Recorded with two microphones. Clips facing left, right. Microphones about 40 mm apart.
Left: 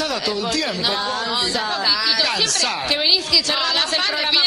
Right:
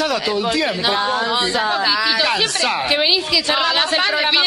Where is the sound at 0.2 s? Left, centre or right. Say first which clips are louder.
Right 3 dB; centre.